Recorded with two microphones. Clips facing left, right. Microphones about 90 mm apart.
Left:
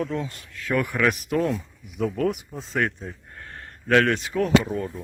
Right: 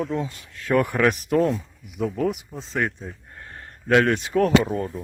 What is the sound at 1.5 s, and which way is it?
Speech, centre (ahead or behind).